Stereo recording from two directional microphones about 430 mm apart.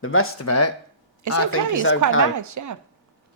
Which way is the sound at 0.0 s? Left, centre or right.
Left.